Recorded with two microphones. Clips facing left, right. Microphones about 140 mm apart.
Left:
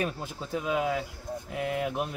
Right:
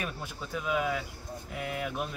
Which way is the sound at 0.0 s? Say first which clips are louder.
Left 5 dB; 30° left (ahead or behind).